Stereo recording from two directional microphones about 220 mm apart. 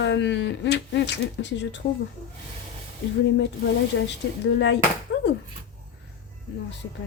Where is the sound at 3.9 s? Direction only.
60° left (ahead or behind).